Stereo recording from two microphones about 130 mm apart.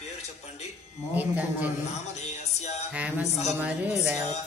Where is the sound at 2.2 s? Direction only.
60° left (ahead or behind).